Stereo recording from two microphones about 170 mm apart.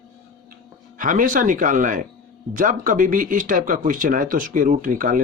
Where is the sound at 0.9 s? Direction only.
50° right (ahead or behind).